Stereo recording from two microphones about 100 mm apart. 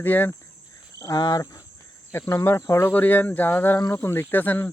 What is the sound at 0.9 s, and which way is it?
Cricket, 35° left (ahead or behind).